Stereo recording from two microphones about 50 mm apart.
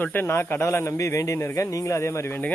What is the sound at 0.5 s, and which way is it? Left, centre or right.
A man's voice, left.